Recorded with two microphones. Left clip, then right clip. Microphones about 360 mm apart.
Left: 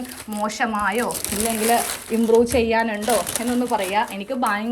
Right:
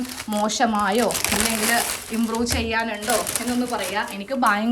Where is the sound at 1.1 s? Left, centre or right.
Centre.